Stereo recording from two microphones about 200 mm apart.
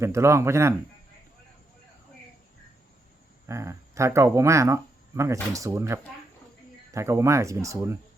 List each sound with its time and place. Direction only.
0.0 s speech: 15° right (ahead or behind)
3.4 s speech: 15° right (ahead or behind)